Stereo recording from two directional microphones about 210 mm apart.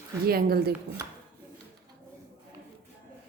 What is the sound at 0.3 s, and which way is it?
Speech, 45° right (ahead or behind).